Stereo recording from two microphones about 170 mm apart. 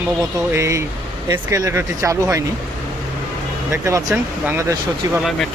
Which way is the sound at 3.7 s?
15° right (ahead or behind).